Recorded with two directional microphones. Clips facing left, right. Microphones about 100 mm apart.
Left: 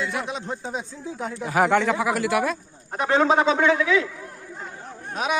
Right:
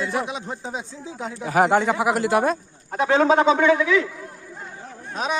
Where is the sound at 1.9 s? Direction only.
25° right (ahead or behind).